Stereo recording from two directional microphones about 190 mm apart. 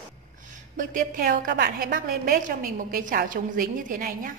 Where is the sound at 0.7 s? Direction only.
45° right (ahead or behind).